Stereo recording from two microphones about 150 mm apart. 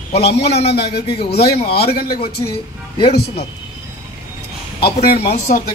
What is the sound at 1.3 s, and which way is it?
Speech, 90° left.